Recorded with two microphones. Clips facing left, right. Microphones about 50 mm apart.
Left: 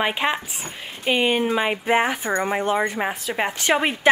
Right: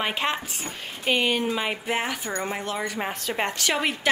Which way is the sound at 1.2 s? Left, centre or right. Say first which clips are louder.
Left 4 dB; left.